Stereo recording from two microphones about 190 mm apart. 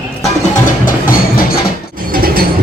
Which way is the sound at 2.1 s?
50° right (ahead or behind).